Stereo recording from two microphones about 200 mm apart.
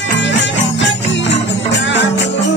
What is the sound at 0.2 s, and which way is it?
Music, 65° left (ahead or behind).